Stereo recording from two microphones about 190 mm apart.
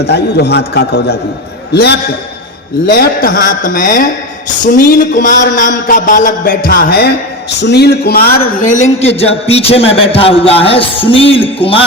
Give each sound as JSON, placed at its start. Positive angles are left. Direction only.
{"t": 0.0, "sound": "a man's voice", "side_deg": 60}